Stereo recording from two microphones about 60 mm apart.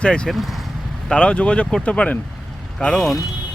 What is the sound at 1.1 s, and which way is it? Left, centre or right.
Speech, centre.